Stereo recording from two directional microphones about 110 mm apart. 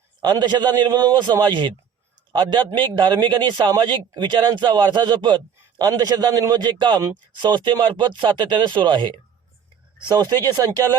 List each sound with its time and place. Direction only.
0.2 s a man's voice: 40° right (ahead or behind)
10.0 s a man's voice: 40° right (ahead or behind)